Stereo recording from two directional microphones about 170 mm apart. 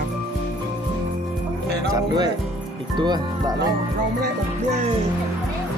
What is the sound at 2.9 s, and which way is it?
Speech, 25° right (ahead or behind).